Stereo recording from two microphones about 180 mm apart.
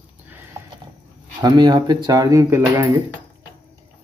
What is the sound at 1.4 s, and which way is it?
Speech, 25° right (ahead or behind).